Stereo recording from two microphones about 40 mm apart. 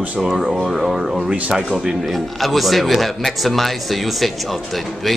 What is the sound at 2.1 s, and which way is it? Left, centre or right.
A man's voice, centre.